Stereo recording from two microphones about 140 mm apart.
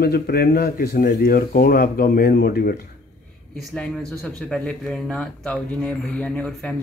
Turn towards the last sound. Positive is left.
turn(degrees=5)  # may be behind; listen again after turning